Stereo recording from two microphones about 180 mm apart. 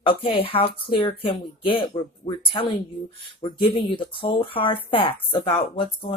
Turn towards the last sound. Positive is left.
turn(degrees=30)  # may be behind; listen again after turning